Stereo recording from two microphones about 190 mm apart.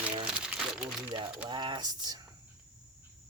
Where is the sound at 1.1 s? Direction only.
25° right (ahead or behind).